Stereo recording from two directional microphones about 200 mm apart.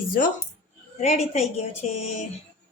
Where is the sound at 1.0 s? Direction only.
30° left (ahead or behind).